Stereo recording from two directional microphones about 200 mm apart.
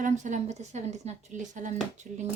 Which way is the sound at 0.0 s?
35° right (ahead or behind).